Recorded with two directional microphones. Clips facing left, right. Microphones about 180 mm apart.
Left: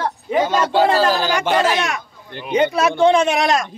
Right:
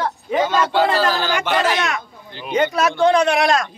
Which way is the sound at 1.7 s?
20° left (ahead or behind).